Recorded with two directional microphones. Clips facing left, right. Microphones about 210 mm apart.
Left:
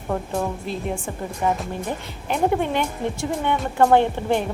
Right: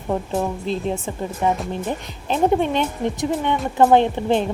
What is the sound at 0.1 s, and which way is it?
A woman's voice, 20° right (ahead or behind).